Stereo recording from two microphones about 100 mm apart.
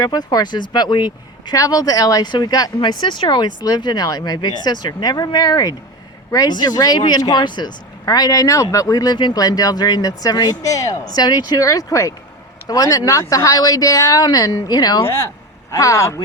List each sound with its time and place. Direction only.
0.0 s speech: 40° left (ahead or behind)
15.7 s speech: 30° left (ahead or behind)